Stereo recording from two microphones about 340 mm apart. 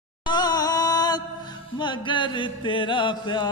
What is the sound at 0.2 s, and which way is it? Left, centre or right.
Music, centre.